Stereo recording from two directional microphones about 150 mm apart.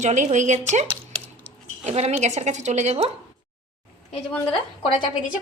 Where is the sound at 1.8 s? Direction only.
45° right (ahead or behind).